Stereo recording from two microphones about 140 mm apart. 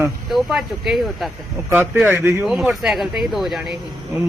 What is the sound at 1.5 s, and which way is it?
Speech, 20° right (ahead or behind).